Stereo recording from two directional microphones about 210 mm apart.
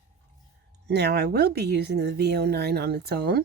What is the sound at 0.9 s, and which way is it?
Speech, 50° right (ahead or behind).